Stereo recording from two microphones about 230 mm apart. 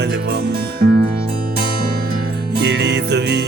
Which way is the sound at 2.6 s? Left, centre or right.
Right.